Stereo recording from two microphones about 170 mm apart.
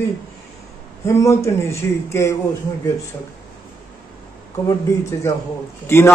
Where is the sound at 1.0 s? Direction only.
15° left (ahead or behind).